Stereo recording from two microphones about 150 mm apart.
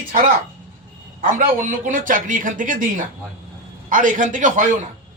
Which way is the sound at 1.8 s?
60° right (ahead or behind).